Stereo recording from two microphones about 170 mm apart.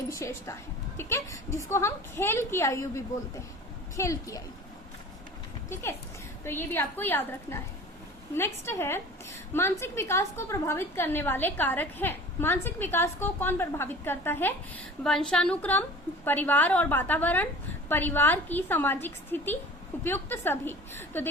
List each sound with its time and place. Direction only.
0.2 s a woman's voice: 15° left (ahead or behind)
6.4 s a woman's voice: 15° left (ahead or behind)